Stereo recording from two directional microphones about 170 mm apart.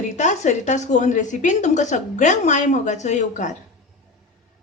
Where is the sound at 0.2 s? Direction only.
45° left (ahead or behind).